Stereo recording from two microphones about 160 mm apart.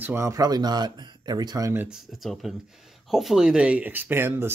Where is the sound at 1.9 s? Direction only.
Centre (ahead or behind).